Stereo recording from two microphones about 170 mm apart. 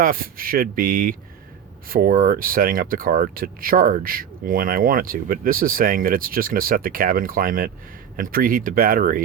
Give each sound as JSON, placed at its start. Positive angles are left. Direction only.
{"t": 0.0, "sound": "speech", "side_deg": -55}